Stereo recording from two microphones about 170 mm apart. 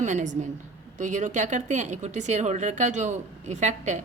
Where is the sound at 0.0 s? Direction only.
45° right (ahead or behind).